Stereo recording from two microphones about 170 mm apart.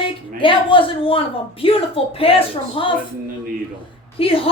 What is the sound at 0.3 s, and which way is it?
Speech, 30° left (ahead or behind).